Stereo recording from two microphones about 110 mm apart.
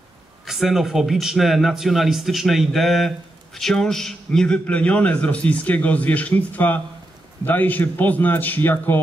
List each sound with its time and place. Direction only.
0.5 s a man's voice: 5° right (ahead or behind); by 9.0 s 20° left (ahead or behind)